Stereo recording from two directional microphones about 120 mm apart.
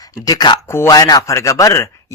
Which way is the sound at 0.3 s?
35° left (ahead or behind).